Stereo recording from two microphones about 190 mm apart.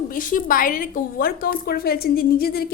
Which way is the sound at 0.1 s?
45° left (ahead or behind).